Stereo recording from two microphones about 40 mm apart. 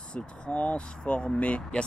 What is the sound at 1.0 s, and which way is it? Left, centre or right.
Speech, left.